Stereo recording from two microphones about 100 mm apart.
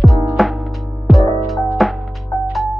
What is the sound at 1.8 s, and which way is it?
Music, centre (ahead or behind).